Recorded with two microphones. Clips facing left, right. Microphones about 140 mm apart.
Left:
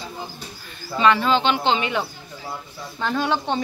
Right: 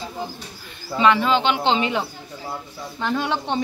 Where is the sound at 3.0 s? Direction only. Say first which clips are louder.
Left 1 dB; 15° right (ahead or behind).